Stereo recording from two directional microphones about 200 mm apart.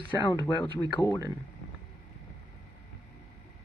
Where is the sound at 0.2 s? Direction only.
20° left (ahead or behind).